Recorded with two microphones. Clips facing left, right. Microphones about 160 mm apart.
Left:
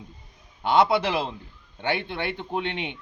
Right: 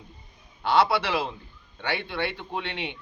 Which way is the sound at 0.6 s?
20° left (ahead or behind).